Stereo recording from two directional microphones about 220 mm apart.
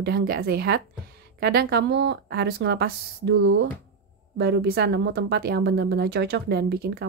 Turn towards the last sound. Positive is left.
turn(degrees=-45)  # may be behind; listen again after turning